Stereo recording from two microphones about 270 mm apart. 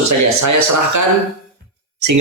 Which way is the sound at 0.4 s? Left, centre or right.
Right.